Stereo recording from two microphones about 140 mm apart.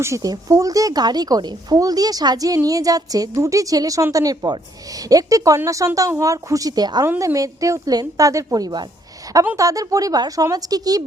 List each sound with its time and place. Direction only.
0.0 s speech: 25° right (ahead or behind)